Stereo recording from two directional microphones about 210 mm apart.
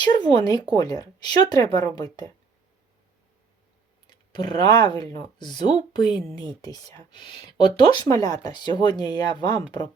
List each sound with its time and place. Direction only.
0.1 s speech: 20° left (ahead or behind)
4.0 s speech: 20° left (ahead or behind)